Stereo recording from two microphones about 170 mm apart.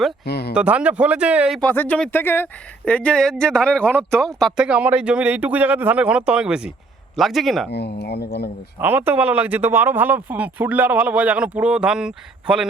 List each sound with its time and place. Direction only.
0.3 s speech: 75° left (ahead or behind)
0.5 s speech: 5° right (ahead or behind)
1.6 s speech: 10° left (ahead or behind)
7.7 s speech: 80° left
8.8 s speech: 10° right (ahead or behind)